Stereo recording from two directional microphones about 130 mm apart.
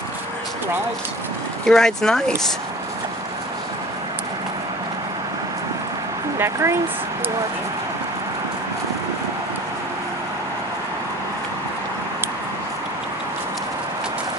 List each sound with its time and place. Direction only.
1.7 s speech: 5° left (ahead or behind)
6.3 s speech: 20° right (ahead or behind)